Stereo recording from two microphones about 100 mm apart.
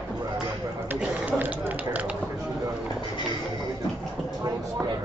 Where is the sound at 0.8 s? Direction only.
15° right (ahead or behind).